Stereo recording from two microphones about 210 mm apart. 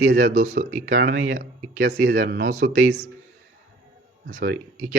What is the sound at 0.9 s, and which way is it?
Speech, 55° right (ahead or behind).